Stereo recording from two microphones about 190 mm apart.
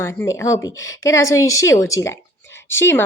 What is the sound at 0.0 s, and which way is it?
A woman's voice, 15° left (ahead or behind).